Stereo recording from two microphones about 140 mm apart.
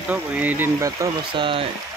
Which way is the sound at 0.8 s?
25° right (ahead or behind).